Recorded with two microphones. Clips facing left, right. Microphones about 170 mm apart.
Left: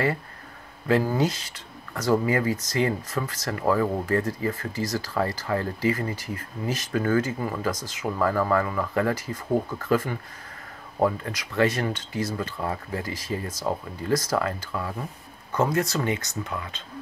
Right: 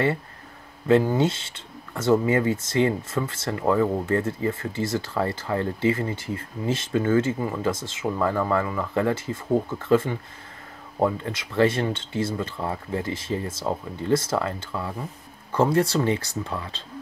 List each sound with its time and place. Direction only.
0.8 s speech: 25° right (ahead or behind)